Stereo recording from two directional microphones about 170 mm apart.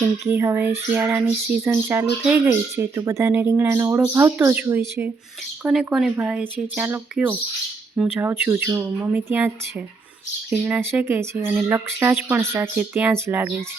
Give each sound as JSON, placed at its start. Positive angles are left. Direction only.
{"t": 0.0, "sound": "speech", "side_deg": -10}
{"t": 10.5, "sound": "speech", "side_deg": -10}